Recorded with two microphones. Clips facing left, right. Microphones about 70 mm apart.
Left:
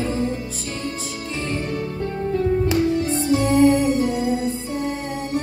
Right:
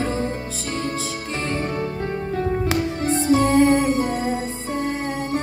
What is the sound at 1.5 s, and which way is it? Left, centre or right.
Music, right.